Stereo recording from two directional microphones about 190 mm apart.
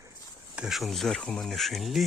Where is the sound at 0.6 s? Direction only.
Centre (ahead or behind).